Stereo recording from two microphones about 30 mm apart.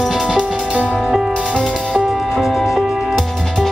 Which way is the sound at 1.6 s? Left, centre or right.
Left.